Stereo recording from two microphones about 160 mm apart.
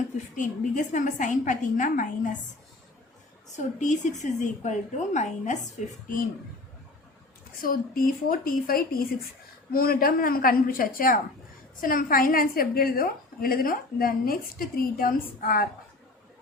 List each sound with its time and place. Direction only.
0.3 s a woman's voice: 50° left (ahead or behind)
3.5 s a woman's voice: 50° left (ahead or behind)
7.6 s a woman's voice: 60° left (ahead or behind)